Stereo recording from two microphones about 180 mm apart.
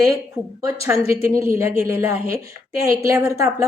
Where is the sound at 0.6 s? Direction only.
15° right (ahead or behind).